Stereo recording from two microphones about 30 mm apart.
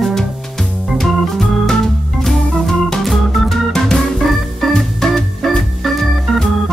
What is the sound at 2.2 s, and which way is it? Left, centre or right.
Organ, centre.